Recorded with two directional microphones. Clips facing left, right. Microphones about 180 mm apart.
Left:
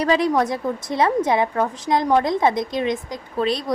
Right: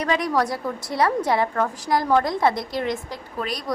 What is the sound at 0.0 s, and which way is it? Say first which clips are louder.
A woman's voice: left 4 dB; 30° left (ahead or behind).